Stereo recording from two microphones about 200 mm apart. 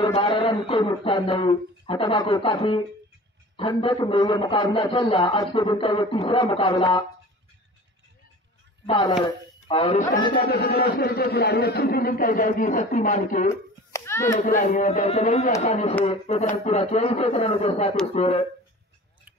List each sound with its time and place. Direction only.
0.0 s a man's voice: 25° left (ahead or behind)
8.8 s speech: 25° left (ahead or behind)
10.1 s a man's voice: 45° left (ahead or behind)
13.5 s a sound: 15° left (ahead or behind)
14.4 s speech: 40° left (ahead or behind)